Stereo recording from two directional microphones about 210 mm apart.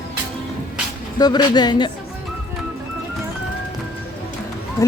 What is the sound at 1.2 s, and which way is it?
Speech, 20° left (ahead or behind).